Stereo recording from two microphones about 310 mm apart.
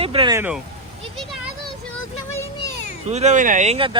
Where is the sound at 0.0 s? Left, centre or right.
Centre.